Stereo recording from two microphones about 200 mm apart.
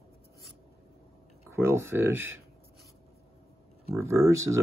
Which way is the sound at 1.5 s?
10° right (ahead or behind).